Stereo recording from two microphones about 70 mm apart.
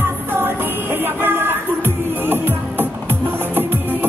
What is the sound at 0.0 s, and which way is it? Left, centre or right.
Music, right.